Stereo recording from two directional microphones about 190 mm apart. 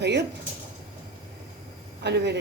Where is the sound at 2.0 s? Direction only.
60° right (ahead or behind).